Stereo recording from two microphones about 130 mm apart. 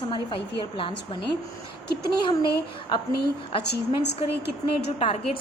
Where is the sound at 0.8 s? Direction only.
40° left (ahead or behind).